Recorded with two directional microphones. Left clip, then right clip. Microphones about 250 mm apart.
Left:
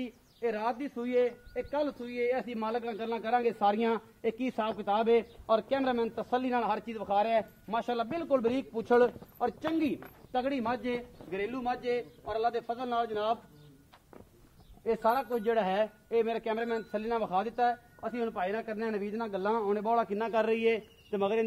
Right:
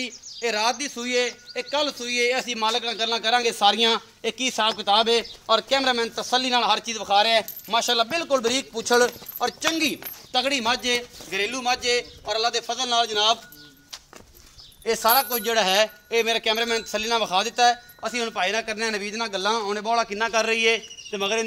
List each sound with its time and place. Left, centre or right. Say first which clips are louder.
0.0 s speech: right 7 dB; right; by 9.9 s centre
10.3 s a man's voice: right 9 dB; right
15.0 s a man's voice: right 9 dB; right; by 19.8 s centre
19.8 s a man's voice: right 6 dB; centre
20.2 s speech: right 7 dB; centre